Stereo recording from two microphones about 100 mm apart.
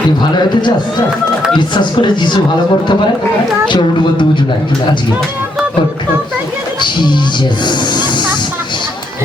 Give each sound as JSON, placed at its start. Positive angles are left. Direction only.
{"t": 0.2, "sound": "a man's voice", "side_deg": 50}
{"t": 3.7, "sound": "a man's voice", "side_deg": 50}
{"t": 6.8, "sound": "a man's voice", "side_deg": 50}
{"t": 7.6, "sound": "snake", "side_deg": 50}